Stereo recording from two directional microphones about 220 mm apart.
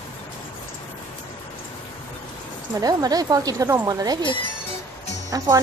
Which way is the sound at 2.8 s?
15° right (ahead or behind).